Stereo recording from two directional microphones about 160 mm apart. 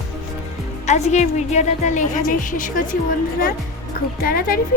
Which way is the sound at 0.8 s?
45° left (ahead or behind).